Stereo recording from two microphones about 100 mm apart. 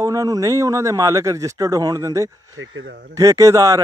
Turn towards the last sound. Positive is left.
turn(degrees=-35)  # may be behind; listen again after turning